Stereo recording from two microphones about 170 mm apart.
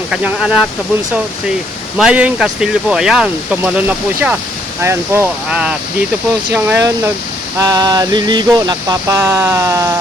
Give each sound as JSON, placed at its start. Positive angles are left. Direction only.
{"t": 0.1, "sound": "speech", "side_deg": -5}
{"t": 2.0, "sound": "speech", "side_deg": -5}
{"t": 4.8, "sound": "a sound", "side_deg": -15}